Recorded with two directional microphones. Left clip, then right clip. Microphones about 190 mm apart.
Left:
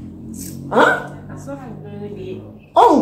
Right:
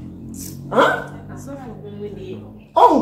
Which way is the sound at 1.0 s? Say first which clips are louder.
Left 1 dB; centre (ahead or behind).